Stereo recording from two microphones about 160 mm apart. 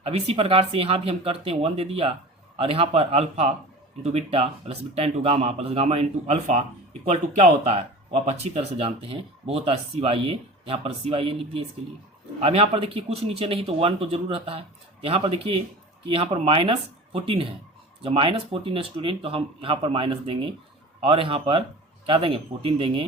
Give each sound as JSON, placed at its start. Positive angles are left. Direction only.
{"t": 0.0, "sound": "speech", "side_deg": -40}